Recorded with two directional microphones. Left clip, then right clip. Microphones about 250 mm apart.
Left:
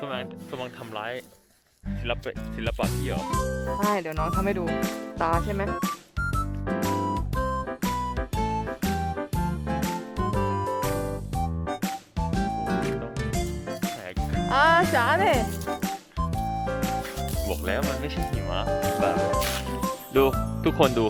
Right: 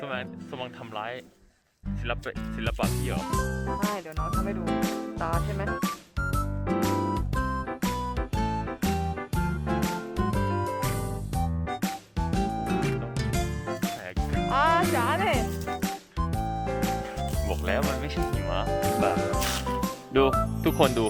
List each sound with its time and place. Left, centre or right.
0.1 s speech: centre
5.8 s music: centre
14.5 s music: left
15.8 s music: centre
16.4 s music: centre
16.8 s music: centre